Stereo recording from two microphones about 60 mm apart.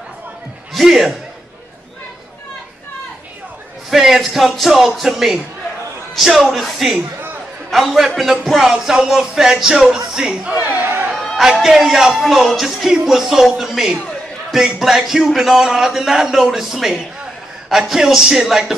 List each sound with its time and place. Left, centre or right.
0.7 s a man's voice: centre
3.9 s a man's voice: centre
8.2 s music: centre
10.7 s chatter: right
11.6 s music: centre
14.5 s a man's voice: centre
17.6 s music: centre